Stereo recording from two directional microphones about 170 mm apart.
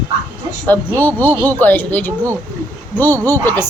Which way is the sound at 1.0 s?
10° left (ahead or behind).